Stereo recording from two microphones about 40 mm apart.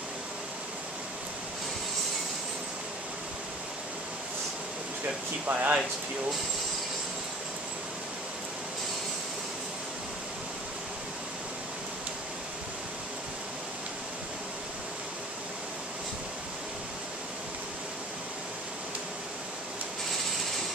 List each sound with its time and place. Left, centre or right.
5.5 s speech: right